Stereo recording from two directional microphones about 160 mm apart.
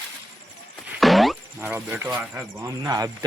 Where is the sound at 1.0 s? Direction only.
Centre (ahead or behind).